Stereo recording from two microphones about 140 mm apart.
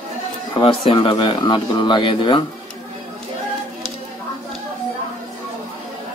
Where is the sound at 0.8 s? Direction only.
40° left (ahead or behind).